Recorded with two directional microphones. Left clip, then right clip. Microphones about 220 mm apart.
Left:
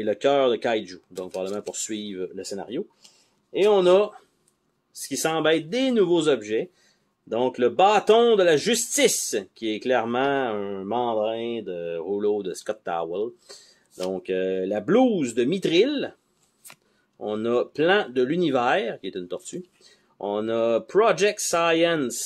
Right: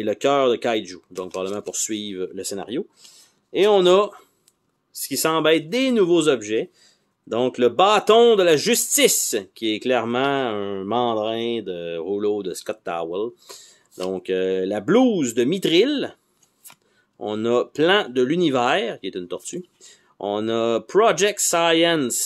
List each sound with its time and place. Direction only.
0.0 s a man's voice: 20° right (ahead or behind)
17.2 s a man's voice: 25° right (ahead or behind)